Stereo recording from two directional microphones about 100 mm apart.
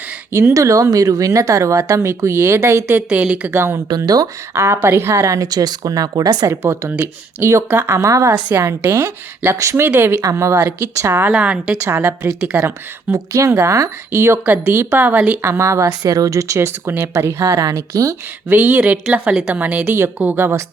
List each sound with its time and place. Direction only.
0.3 s speech: 30° right (ahead or behind)
3.8 s speech: 40° right (ahead or behind)
6.6 s a woman's voice: 25° right (ahead or behind)
7.4 s a woman's voice: 25° right (ahead or behind)
8.4 s a woman's voice: 20° right (ahead or behind)
11.3 s speech: 10° right (ahead or behind)
11.8 s a woman's voice: 25° right (ahead or behind)
15.4 s a woman's voice: 30° right (ahead or behind)
18.4 s a woman's voice: 20° right (ahead or behind)